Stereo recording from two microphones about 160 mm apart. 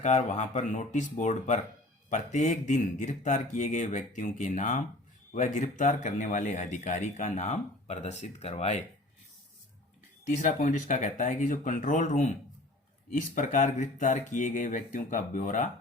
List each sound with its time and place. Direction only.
0.0 s speech: 45° left (ahead or behind)
10.4 s speech: 55° left (ahead or behind)